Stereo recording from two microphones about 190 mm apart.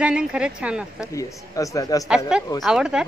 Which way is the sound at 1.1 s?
15° left (ahead or behind).